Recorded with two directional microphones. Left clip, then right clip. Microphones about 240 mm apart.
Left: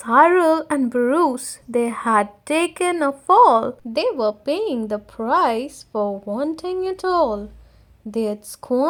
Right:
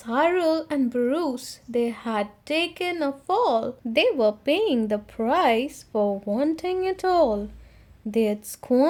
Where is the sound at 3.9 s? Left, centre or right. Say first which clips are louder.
Even; centre.